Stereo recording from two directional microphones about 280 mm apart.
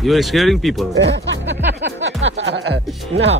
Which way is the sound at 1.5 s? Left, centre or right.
Right.